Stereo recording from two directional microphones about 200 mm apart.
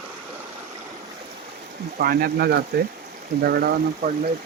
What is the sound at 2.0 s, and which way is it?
Speech, 50° right (ahead or behind).